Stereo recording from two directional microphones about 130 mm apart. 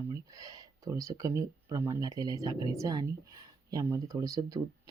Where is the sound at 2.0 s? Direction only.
30° right (ahead or behind).